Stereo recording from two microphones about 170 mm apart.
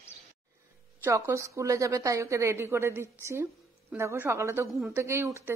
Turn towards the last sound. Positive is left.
turn(degrees=-15)  # may be behind; listen again after turning